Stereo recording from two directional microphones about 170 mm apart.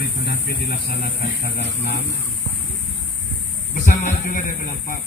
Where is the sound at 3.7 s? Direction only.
50° left (ahead or behind).